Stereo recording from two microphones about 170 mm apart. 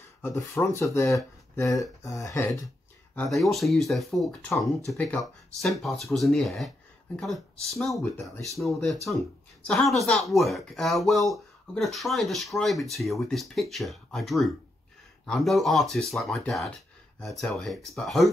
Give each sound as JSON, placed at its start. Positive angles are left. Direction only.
{"t": 0.2, "sound": "speech", "side_deg": 15}
{"t": 3.2, "sound": "speech", "side_deg": 0}